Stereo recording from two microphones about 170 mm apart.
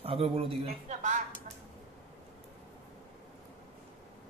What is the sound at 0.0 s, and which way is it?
Speech, 35° right (ahead or behind).